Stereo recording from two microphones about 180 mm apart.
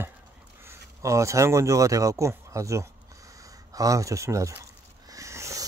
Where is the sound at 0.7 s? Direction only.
15° right (ahead or behind).